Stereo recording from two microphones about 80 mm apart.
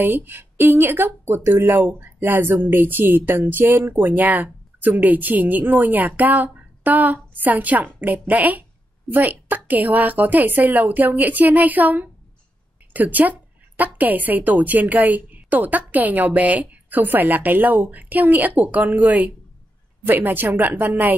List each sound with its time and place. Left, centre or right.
0.0 s a woman's voice: right